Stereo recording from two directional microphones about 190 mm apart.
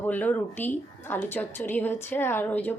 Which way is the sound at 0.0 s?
10° left (ahead or behind).